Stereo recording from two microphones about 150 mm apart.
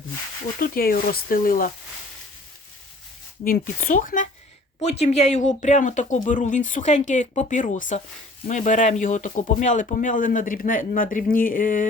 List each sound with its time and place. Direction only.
0.6 s speech: 80° left
3.4 s speech: 75° left (ahead or behind)
4.8 s speech: 45° left (ahead or behind); by 11.9 s 65° left (ahead or behind)